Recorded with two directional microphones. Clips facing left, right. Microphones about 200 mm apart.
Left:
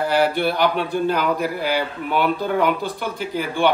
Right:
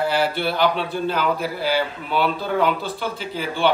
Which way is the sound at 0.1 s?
15° left (ahead or behind).